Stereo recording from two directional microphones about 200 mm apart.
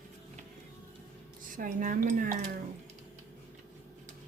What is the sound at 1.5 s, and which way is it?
Speech, 40° right (ahead or behind).